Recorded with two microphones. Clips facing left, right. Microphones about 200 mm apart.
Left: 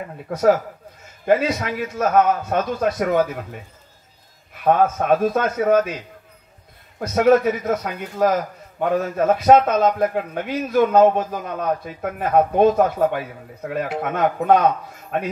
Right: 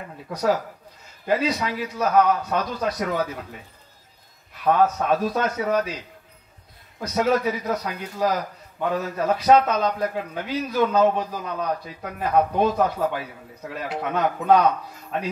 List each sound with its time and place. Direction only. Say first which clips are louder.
0.3 s a man's voice: left 6 dB; 50° left (ahead or behind)
4.7 s a man's voice: left 1 dB; 50° left (ahead or behind)
7.0 s a man's voice: left 6 dB; 50° left (ahead or behind)